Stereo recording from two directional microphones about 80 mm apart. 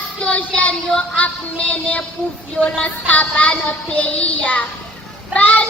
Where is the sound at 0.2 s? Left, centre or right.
Centre.